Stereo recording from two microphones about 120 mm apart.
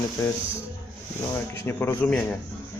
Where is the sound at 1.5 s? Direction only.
20° left (ahead or behind).